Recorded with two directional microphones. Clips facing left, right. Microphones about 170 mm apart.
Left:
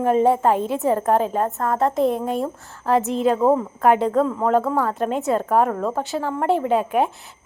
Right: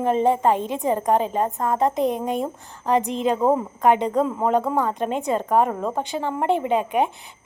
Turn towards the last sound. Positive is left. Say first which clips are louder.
# left 2 dB
turn(degrees=0)  # may be behind; listen again after turning